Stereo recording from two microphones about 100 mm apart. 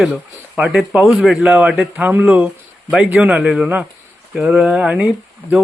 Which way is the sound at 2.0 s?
15° right (ahead or behind).